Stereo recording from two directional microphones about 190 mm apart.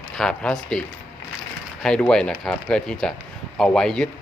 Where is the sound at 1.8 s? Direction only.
5° left (ahead or behind).